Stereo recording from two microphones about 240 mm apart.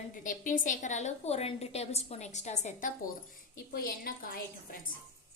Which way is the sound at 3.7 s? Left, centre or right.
Left.